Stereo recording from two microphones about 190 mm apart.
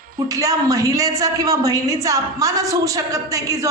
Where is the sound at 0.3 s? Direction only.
15° right (ahead or behind).